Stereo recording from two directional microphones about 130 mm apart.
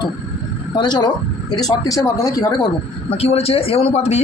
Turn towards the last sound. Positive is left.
turn(degrees=55)  # may be behind; listen again after turning